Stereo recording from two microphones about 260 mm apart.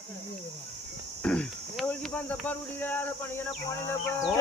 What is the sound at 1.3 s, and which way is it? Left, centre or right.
Speech, centre.